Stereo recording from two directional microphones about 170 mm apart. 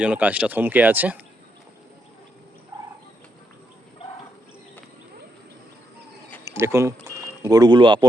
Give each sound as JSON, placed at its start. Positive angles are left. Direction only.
{"t": 0.0, "sound": "speech", "side_deg": -10}
{"t": 6.4, "sound": "speech", "side_deg": -15}